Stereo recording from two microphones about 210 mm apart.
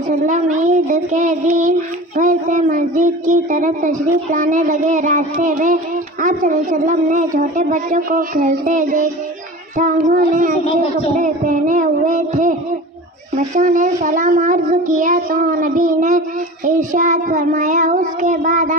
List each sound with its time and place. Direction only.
0.1 s speech: 35° right (ahead or behind)
13.6 s speech: 40° right (ahead or behind)